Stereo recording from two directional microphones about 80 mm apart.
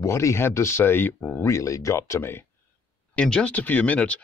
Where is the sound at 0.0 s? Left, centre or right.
Left.